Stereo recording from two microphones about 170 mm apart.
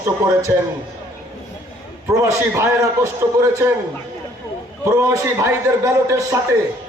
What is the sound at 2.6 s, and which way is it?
A man's voice, 15° right (ahead or behind).